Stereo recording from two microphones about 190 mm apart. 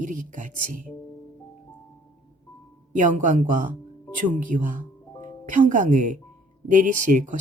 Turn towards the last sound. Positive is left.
turn(degrees=-40)  # may be behind; listen again after turning